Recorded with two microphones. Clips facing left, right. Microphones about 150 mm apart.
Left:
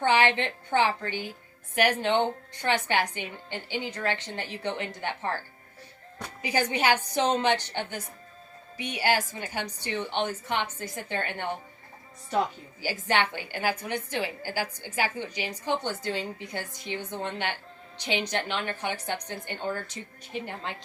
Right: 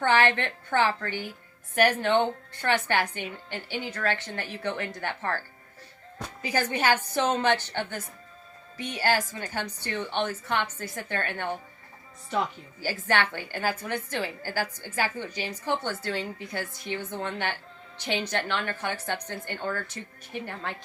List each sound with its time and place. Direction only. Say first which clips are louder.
0.0 s a woman's voice: even; 15° left (ahead or behind)
6.4 s a woman's voice: even; 15° left (ahead or behind)
12.8 s a woman's voice: even; 15° left (ahead or behind)